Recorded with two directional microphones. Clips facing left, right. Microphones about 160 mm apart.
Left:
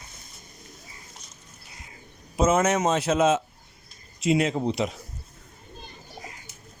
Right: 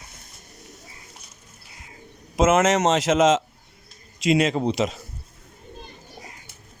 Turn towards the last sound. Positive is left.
turn(degrees=-90)